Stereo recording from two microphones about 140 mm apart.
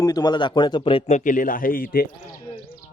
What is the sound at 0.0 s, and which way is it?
A man's voice, 30° left (ahead or behind).